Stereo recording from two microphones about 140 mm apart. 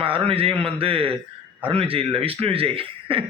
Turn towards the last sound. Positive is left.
turn(degrees=-40)  # may be behind; listen again after turning